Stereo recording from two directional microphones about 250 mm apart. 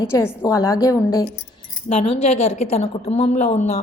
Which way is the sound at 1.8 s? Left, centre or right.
Left.